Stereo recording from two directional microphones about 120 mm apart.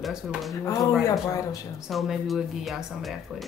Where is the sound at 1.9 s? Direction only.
Centre (ahead or behind).